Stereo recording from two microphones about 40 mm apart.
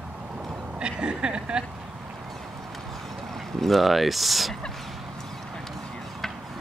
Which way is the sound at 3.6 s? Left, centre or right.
Centre.